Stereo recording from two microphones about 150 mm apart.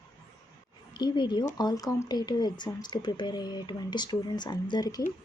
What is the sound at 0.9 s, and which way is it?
Speech, 30° left (ahead or behind).